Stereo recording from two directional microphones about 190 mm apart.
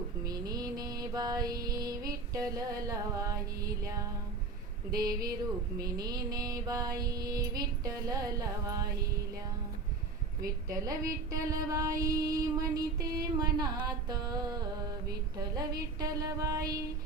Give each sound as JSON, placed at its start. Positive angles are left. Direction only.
{"t": 0.3, "sound": "music", "side_deg": -20}
{"t": 4.9, "sound": "female singing", "side_deg": -20}
{"t": 10.4, "sound": "female singing", "side_deg": -20}